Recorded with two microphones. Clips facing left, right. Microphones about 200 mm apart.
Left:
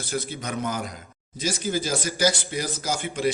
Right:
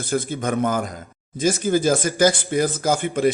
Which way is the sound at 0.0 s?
50° right (ahead or behind).